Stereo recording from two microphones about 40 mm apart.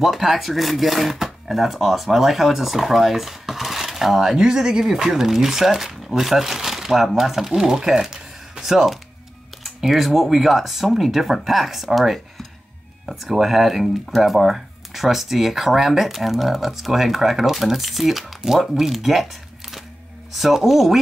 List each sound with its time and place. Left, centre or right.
0.0 s speech: centre
4.4 s speech: centre
20.3 s speech: centre